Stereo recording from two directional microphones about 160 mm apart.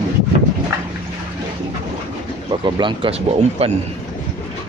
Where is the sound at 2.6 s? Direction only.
30° right (ahead or behind).